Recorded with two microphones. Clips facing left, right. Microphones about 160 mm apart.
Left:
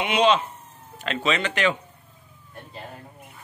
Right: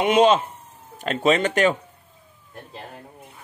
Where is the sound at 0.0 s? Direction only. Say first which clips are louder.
Right 4 dB; 45° right (ahead or behind).